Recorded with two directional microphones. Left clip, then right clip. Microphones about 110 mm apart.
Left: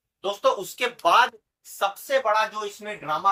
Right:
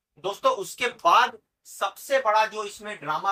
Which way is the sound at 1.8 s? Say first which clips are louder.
Left 1 dB; 20° left (ahead or behind).